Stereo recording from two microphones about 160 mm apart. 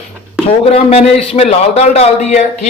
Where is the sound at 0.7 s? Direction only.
40° left (ahead or behind).